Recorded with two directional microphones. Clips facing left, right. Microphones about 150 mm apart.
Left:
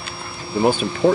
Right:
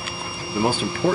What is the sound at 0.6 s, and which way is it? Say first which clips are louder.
Speech: left 4 dB; 20° left (ahead or behind).